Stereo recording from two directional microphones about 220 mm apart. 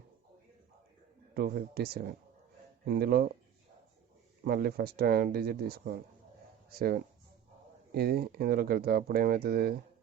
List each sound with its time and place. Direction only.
1.3 s speech: 45° right (ahead or behind)
4.4 s speech: 45° right (ahead or behind)